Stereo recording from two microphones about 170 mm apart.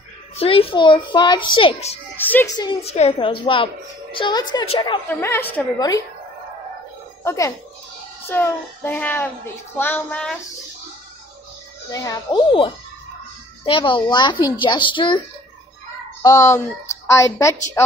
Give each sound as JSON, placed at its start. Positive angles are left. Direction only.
{"t": 0.4, "sound": "a woman's voice", "side_deg": 35}
{"t": 2.1, "sound": "a child's voice", "side_deg": 10}
{"t": 2.5, "sound": "a child's voice", "side_deg": 25}
{"t": 2.8, "sound": "a woman's voice", "side_deg": 40}
{"t": 5.0, "sound": "a child's voice", "side_deg": 15}
{"t": 7.2, "sound": "a child's voice", "side_deg": 20}
{"t": 11.9, "sound": "a child's voice", "side_deg": 20}
{"t": 16.2, "sound": "a child's voice", "side_deg": 20}